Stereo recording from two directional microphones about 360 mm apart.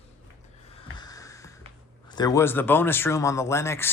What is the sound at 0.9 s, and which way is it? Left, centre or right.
Snort, centre.